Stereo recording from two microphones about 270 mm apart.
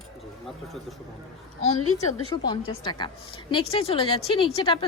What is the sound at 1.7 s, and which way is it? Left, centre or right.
Speech, left.